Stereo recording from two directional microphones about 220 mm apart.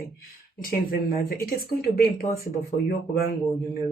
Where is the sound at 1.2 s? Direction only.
40° left (ahead or behind).